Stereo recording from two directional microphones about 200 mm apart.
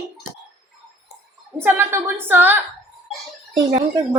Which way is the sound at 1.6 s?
10° right (ahead or behind).